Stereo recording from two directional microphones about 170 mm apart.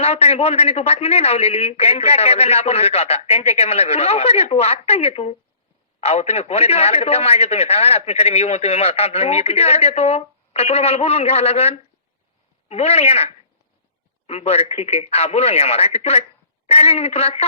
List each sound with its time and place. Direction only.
0.0 s a man's voice: 35° left (ahead or behind)
14.3 s a man's voice: 40° left (ahead or behind)